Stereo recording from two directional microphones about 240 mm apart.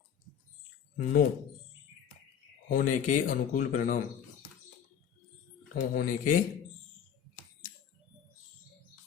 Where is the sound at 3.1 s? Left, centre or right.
Left.